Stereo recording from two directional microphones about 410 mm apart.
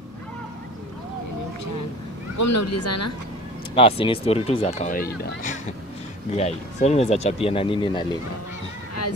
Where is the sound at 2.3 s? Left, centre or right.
Left.